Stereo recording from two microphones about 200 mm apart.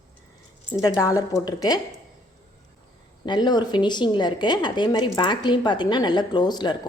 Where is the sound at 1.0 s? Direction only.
20° left (ahead or behind).